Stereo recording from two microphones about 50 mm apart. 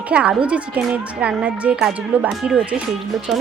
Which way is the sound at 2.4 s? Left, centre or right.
Centre.